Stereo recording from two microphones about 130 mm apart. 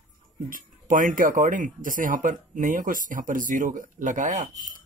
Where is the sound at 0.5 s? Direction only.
90° right.